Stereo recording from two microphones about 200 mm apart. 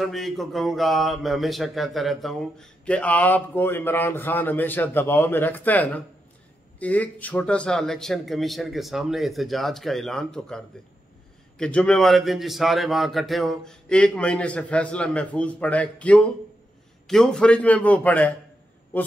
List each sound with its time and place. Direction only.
0.0 s a man's voice: centre (ahead or behind)